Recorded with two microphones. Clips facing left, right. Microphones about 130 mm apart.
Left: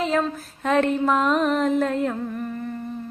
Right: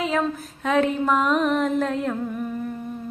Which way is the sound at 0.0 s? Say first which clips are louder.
Left 1 dB; centre (ahead or behind).